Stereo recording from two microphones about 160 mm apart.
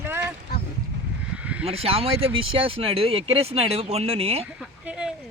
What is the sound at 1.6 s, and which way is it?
Speech, 40° right (ahead or behind).